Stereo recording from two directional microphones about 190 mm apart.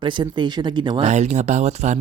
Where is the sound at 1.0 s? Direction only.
35° right (ahead or behind).